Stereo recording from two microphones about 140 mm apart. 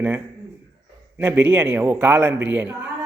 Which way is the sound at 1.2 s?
15° right (ahead or behind).